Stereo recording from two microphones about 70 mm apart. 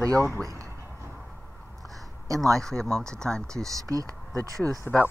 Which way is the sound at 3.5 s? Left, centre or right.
Right.